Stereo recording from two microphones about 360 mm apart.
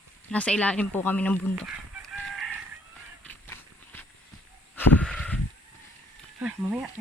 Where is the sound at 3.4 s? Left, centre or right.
Centre.